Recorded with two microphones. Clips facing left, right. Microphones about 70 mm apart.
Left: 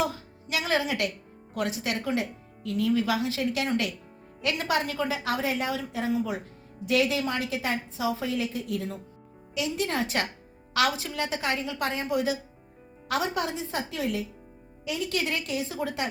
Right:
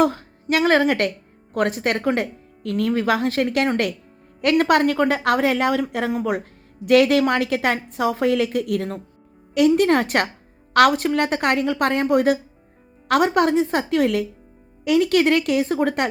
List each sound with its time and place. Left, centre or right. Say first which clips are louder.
0.0 s a woman's voice: right 10 dB; right